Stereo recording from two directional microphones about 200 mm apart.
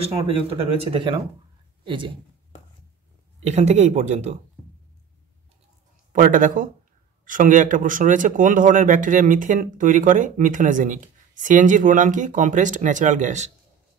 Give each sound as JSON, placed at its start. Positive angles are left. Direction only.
{"t": 0.1, "sound": "speech", "side_deg": -30}
{"t": 3.4, "sound": "speech", "side_deg": -35}
{"t": 6.1, "sound": "speech", "side_deg": -40}